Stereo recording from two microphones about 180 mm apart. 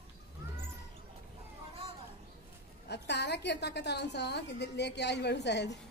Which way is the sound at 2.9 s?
70° left (ahead or behind).